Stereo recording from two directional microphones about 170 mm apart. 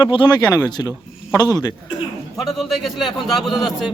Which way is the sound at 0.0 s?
30° left (ahead or behind).